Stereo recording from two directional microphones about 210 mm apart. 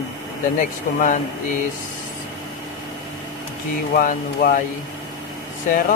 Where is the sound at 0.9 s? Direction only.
40° left (ahead or behind).